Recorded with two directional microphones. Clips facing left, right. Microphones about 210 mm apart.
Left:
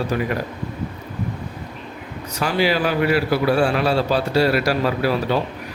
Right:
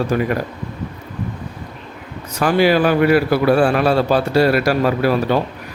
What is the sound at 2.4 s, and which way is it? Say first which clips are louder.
A man's voice: right 6 dB; 50° right (ahead or behind).